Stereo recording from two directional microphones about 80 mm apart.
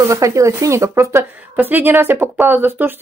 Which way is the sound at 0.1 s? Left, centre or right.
Right.